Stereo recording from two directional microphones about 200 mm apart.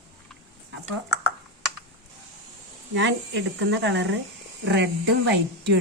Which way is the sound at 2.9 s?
65° right (ahead or behind).